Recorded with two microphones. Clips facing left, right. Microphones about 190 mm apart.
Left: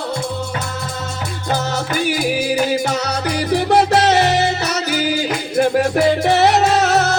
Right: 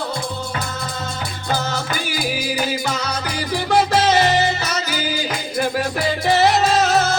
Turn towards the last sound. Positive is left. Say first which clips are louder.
# left 2 dB
turn(degrees=65)  # may be behind; listen again after turning